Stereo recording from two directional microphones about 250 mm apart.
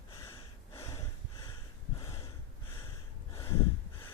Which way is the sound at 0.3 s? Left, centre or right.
Centre.